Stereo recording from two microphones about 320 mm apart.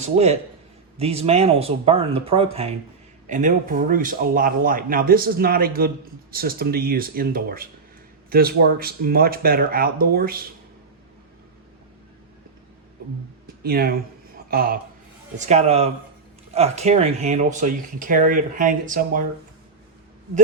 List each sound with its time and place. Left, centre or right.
0.0 s a man's voice: centre
13.6 s a man's voice: right